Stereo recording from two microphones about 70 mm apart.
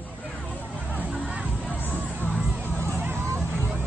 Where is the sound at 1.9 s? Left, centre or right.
Right.